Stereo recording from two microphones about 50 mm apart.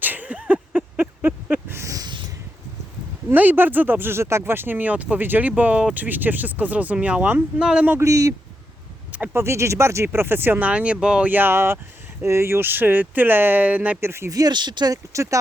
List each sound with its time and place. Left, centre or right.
0.0 s a sound: right
3.3 s speech: right
4.2 s speech: right
7.6 s speech: centre
7.9 s a man's voice: right
9.3 s speech: right
10.1 s speech: right
10.6 s speech: right
11.2 s speech: right
11.5 s speech: right
14.0 s speech: right
15.1 s a man's voice: right